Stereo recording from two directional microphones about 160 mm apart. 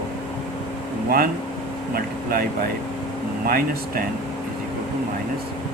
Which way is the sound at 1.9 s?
65° right (ahead or behind).